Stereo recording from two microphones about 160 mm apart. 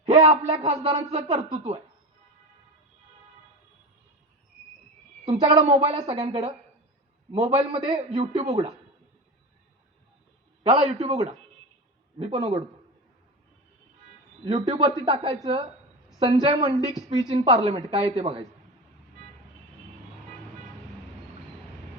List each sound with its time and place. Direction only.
0.0 s a man's voice: 40° right (ahead or behind)
5.2 s a man's voice: 40° right (ahead or behind)
10.7 s a man's voice: 40° right (ahead or behind)
15.0 s a man's voice: 35° right (ahead or behind)